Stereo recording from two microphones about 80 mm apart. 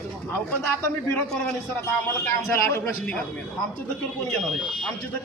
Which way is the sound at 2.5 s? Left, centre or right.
Left.